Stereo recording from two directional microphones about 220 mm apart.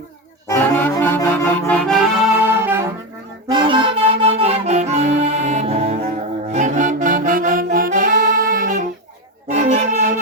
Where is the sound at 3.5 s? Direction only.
20° right (ahead or behind).